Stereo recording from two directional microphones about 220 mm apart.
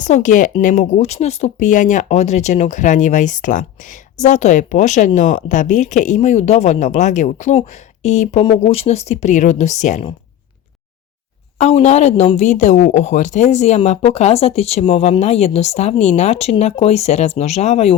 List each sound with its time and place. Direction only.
0.0 s speech: 35° left (ahead or behind)
11.5 s speech: 30° left (ahead or behind)